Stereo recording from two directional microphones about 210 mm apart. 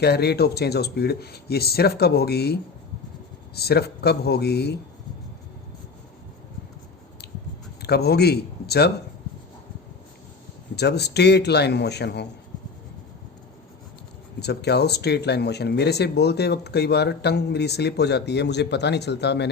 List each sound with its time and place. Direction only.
0.0 s speech: 50° left (ahead or behind)
7.8 s speech: 50° left (ahead or behind)
10.8 s speech: 50° left (ahead or behind)
14.3 s speech: 50° left (ahead or behind)